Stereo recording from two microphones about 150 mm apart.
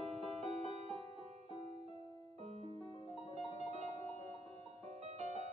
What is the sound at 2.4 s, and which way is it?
Music, 45° right (ahead or behind).